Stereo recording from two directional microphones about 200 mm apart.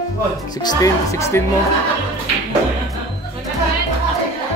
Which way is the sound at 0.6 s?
20° left (ahead or behind).